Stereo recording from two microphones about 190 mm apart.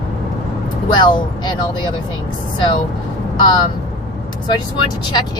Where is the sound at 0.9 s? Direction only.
25° left (ahead or behind).